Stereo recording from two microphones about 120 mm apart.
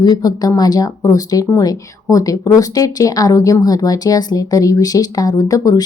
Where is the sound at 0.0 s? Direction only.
30° left (ahead or behind).